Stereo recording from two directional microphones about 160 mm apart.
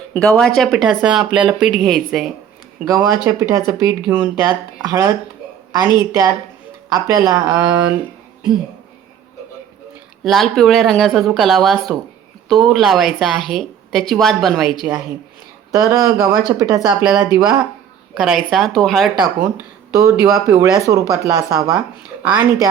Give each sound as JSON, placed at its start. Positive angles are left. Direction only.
{"t": 0.1, "sound": "a woman's voice", "side_deg": 5}
{"t": 2.8, "sound": "speech", "side_deg": -20}
{"t": 10.2, "sound": "a woman's voice", "side_deg": 0}
{"t": 15.7, "sound": "speech", "side_deg": -20}
{"t": 16.8, "sound": "a woman's voice", "side_deg": -5}
{"t": 19.5, "sound": "speech", "side_deg": -20}